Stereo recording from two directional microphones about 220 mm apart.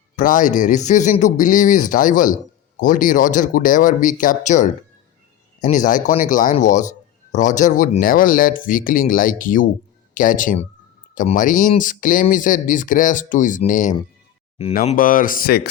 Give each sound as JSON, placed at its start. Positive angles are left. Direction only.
{"t": 0.2, "sound": "speech", "side_deg": 35}